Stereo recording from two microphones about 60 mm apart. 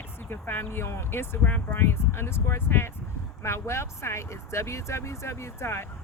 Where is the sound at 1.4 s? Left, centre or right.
Left.